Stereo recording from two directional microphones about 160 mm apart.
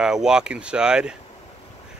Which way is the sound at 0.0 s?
5° right (ahead or behind).